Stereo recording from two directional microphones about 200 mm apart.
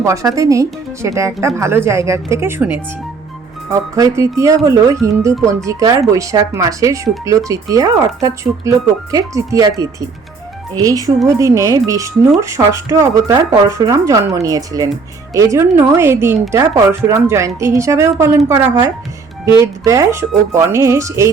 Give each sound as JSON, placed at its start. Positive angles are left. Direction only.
{"t": 0.0, "sound": "speech", "side_deg": -15}